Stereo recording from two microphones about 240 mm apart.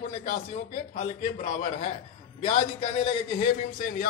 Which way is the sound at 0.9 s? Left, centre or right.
Left.